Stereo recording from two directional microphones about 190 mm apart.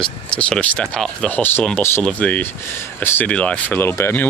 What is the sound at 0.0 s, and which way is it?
Speech, 5° left (ahead or behind).